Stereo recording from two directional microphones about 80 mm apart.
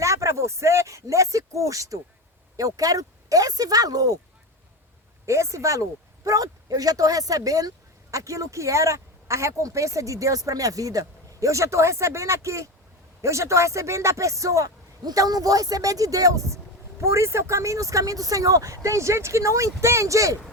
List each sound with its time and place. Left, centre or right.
0.0 s speech: right
5.2 s speech: right